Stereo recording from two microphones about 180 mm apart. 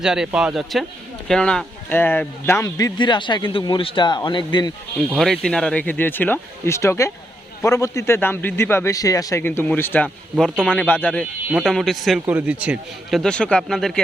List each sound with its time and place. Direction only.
0.0 s a man's voice: 5° right (ahead or behind); by 4.7 s 25° left (ahead or behind)
4.9 s a man's voice: centre (ahead or behind)